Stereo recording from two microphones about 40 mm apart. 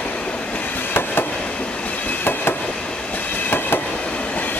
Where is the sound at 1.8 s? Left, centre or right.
Left.